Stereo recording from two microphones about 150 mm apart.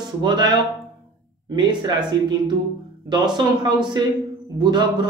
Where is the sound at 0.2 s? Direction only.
30° right (ahead or behind).